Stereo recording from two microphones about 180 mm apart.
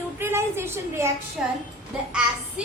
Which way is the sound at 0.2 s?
15° right (ahead or behind).